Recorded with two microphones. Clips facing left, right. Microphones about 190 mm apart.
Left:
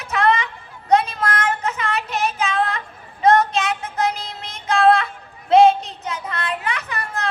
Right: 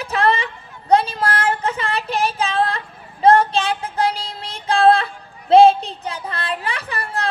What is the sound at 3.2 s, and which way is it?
Child singing, 30° right (ahead or behind).